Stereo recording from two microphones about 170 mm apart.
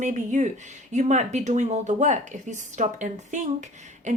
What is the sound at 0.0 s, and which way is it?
Speech, 45° right (ahead or behind).